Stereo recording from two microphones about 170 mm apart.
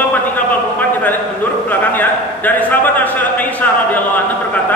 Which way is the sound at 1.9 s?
10° left (ahead or behind).